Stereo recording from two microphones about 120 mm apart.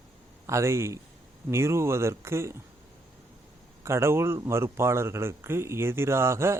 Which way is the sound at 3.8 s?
20° right (ahead or behind).